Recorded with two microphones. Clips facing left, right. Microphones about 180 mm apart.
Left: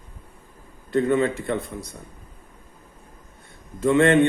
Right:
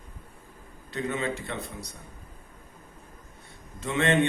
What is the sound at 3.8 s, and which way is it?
Speech, 50° left (ahead or behind).